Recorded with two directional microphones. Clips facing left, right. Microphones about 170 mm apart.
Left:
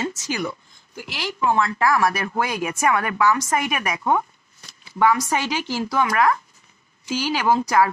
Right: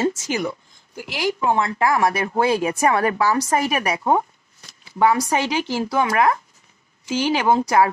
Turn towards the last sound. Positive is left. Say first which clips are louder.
# right 2 dB
turn(degrees=-25)  # may be behind; listen again after turning